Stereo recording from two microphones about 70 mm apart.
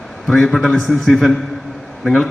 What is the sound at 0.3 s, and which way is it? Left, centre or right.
A man's voice, centre.